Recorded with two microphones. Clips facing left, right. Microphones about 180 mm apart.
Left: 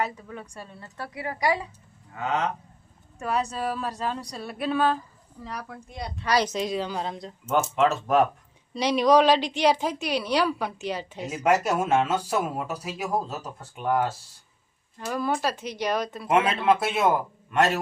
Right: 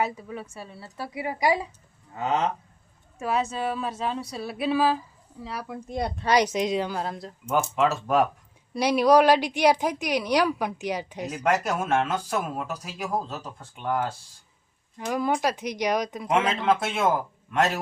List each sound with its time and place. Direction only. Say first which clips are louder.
0.0 s a woman's voice: right 2 dB; 10° right (ahead or behind)
2.1 s speech: right 2 dB; 30° right (ahead or behind)
3.2 s speech: right 1 dB; 5° right (ahead or behind)
5.9 s a woman's voice: right 8 dB; 50° right (ahead or behind)
6.2 s a woman's voice: right 2 dB; 15° right (ahead or behind)
6.9 s a woman's voice: even; 5° right (ahead or behind)
11.4 s speech: left 2 dB; 10° left (ahead or behind)
14.9 s a woman's voice: right 2 dB; 15° right (ahead or behind)
16.3 s speech: left 2 dB; 5° left (ahead or behind)